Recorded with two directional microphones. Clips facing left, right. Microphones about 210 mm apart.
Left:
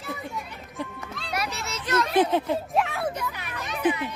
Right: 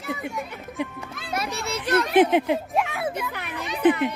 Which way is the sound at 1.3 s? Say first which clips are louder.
Right 3 dB; 30° right (ahead or behind).